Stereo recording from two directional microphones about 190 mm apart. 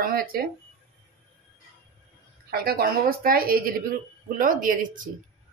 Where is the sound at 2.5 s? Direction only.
55° right (ahead or behind).